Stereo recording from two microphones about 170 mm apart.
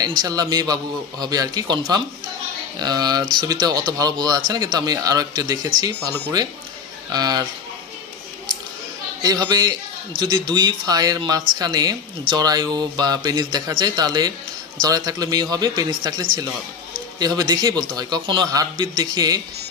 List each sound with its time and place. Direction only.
0.0 s speech: 25° right (ahead or behind)
9.2 s speech: 20° right (ahead or behind)